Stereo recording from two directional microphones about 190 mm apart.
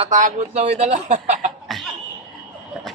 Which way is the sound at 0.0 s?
40° right (ahead or behind).